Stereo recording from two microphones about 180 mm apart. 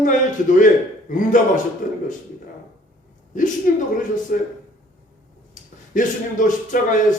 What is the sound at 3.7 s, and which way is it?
Speech, 50° left (ahead or behind).